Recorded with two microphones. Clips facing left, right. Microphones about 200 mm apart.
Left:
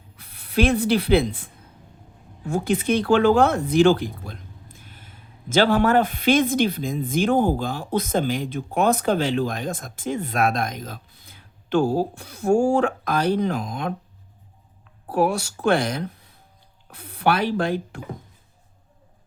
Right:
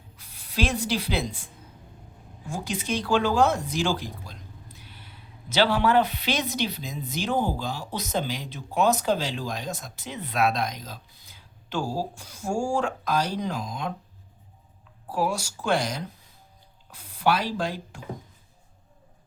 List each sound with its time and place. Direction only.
0.2 s rub: 60° left (ahead or behind)
2.5 s speech: 55° left (ahead or behind)
15.0 s speech: 60° left (ahead or behind)